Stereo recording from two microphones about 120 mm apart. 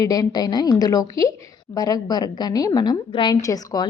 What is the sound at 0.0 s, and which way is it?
Speech, 30° left (ahead or behind).